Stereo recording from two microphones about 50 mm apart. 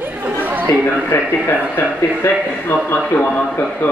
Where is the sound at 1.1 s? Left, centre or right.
Left.